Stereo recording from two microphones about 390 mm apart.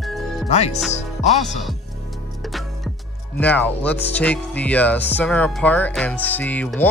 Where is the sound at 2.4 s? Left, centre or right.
Centre.